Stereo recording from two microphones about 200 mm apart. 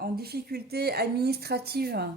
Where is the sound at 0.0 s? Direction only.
50° right (ahead or behind).